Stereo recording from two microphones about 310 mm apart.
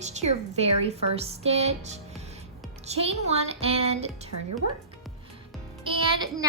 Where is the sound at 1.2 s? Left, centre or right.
Centre.